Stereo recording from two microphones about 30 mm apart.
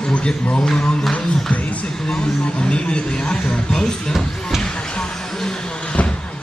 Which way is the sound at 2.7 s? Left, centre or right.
Left.